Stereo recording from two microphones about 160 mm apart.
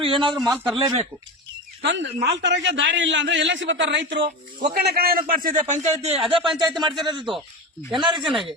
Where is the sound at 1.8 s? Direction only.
90° right.